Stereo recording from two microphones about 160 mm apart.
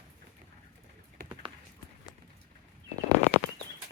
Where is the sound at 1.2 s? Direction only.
65° right (ahead or behind).